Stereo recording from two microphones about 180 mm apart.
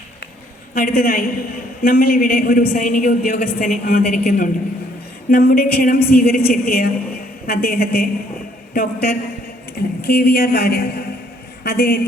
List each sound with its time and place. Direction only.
0.7 s a woman's voice: 55° left (ahead or behind)